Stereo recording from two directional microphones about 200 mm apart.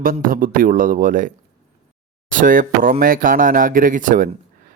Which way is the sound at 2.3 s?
45° right (ahead or behind).